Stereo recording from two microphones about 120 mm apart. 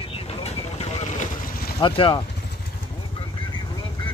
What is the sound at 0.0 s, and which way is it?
Vehicle, 50° left (ahead or behind).